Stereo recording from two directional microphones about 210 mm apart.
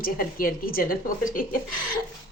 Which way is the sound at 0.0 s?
45° left (ahead or behind).